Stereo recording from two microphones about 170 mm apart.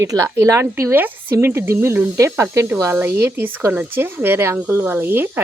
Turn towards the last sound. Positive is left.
turn(degrees=-10)  # may be behind; listen again after turning